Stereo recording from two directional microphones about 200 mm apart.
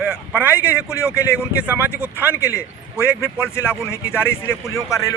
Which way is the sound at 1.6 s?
5° right (ahead or behind).